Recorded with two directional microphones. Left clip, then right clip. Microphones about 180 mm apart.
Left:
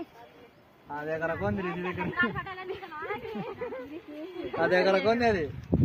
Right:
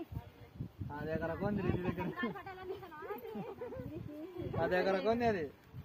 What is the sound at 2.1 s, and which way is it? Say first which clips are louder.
Speech: left 12 dB; 10° right (ahead or behind).